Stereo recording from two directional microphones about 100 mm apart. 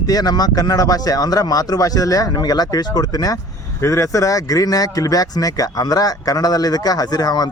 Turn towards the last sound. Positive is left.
turn(degrees=40)  # may be behind; listen again after turning